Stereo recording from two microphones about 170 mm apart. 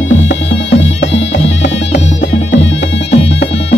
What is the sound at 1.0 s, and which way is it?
Music, 90° left.